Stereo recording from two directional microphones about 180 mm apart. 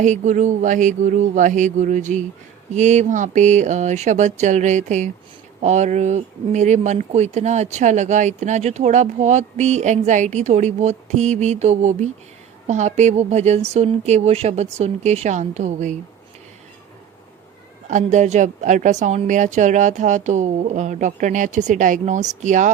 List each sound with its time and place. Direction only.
0.0 s a woman's voice: 45° right (ahead or behind)
17.8 s a woman's voice: 40° right (ahead or behind)